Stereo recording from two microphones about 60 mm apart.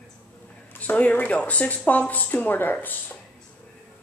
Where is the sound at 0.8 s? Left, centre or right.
Left.